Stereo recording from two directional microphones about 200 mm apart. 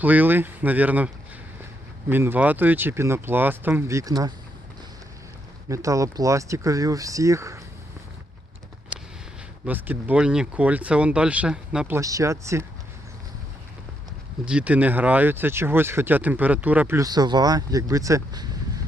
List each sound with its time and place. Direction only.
0.0 s speech: 10° right (ahead or behind)
5.6 s speech: 15° right (ahead or behind)
9.6 s speech: 10° right (ahead or behind)
14.4 s speech: 5° right (ahead or behind)